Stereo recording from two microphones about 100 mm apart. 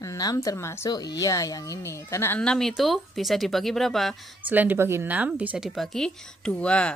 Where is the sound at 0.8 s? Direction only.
40° left (ahead or behind); by 2.4 s 25° left (ahead or behind).